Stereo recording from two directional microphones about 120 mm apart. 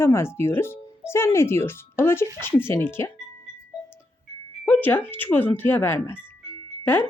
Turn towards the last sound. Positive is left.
turn(degrees=20)  # may be behind; listen again after turning